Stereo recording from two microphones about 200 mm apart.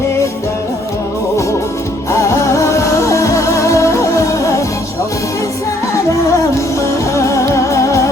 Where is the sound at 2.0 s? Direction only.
15° left (ahead or behind).